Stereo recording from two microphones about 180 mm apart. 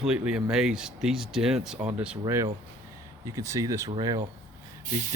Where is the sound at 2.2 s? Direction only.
15° right (ahead or behind).